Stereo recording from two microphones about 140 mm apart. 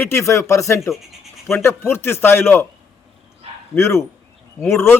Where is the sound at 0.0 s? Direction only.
20° left (ahead or behind).